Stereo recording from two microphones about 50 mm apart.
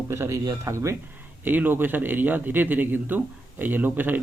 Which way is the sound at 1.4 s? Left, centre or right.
Right.